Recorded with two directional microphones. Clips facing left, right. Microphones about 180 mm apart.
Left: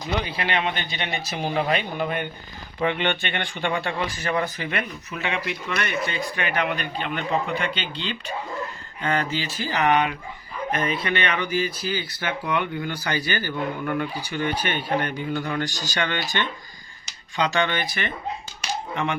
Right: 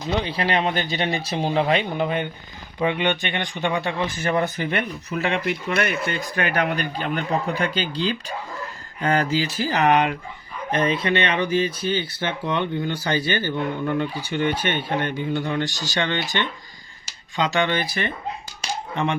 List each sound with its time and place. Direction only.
0.3 s speech: 35° right (ahead or behind)
6.1 s speech: 45° right (ahead or behind); by 17.7 s 20° right (ahead or behind)
17.7 s speech: 35° right (ahead or behind)